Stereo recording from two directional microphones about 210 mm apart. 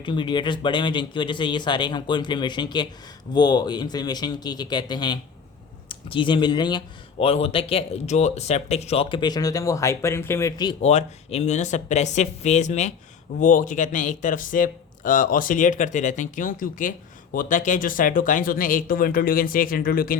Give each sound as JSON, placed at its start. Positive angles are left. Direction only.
{"t": 0.0, "sound": "speech", "side_deg": 25}
{"t": 10.8, "sound": "a man's voice", "side_deg": 30}